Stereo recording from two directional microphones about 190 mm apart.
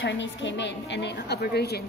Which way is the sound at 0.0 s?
70° left (ahead or behind).